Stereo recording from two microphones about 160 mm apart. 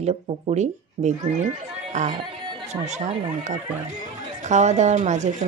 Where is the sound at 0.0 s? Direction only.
45° right (ahead or behind).